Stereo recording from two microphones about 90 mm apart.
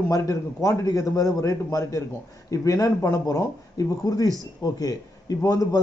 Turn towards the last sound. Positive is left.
turn(degrees=40)  # may be behind; listen again after turning